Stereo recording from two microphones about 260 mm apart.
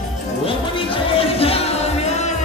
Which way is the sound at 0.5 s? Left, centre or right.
Left.